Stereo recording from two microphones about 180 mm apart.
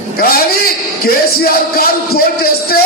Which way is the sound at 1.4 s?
55° left (ahead or behind).